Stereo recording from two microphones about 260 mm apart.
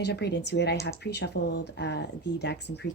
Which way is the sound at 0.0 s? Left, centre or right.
Left.